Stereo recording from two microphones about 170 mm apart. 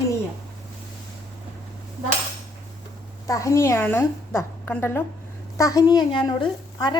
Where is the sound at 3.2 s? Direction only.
20° left (ahead or behind).